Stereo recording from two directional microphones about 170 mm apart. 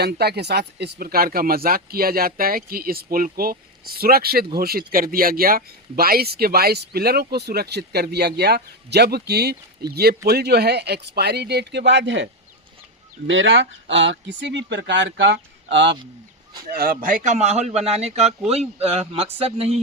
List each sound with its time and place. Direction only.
0.0 s speech: 70° right (ahead or behind)
0.8 s speech: 65° right (ahead or behind); by 16.0 s 90° right
16.7 s a man's voice: 60° right (ahead or behind); by 19.7 s 35° right (ahead or behind)